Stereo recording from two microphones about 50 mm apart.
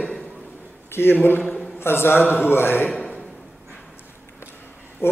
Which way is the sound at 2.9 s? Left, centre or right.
Left.